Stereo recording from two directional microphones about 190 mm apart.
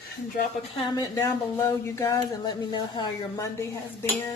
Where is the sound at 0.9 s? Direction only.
15° left (ahead or behind).